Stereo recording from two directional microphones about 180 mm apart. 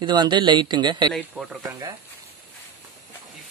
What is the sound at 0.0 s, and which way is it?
Speech, 25° right (ahead or behind).